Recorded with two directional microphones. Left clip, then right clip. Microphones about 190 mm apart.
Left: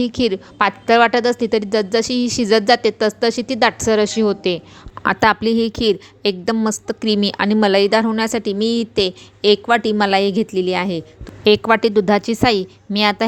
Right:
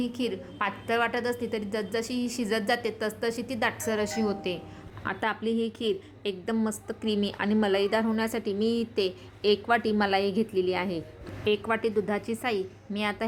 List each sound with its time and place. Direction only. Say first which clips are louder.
0.0 s a woman's voice: left 13 dB; 40° left (ahead or behind)
5.0 s a woman's voice: left 15 dB; 50° left (ahead or behind)
11.4 s a woman's voice: left 13 dB; 55° left (ahead or behind)